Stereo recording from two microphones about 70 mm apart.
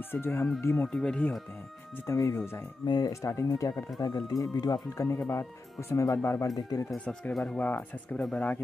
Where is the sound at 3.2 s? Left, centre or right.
Left.